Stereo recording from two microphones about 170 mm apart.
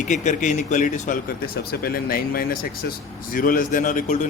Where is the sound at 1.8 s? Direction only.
60° left (ahead or behind); by 4.3 s 45° left (ahead or behind).